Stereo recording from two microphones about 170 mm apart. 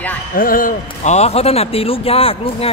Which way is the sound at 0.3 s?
55° left (ahead or behind).